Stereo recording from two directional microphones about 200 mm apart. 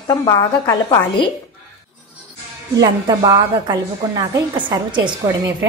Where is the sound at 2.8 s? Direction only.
15° right (ahead or behind).